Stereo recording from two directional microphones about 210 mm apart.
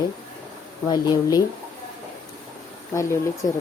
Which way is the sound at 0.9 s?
20° left (ahead or behind).